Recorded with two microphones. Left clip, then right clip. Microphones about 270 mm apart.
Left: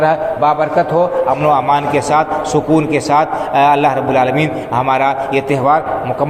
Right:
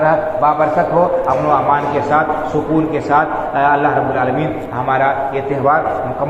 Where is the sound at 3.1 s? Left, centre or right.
Left.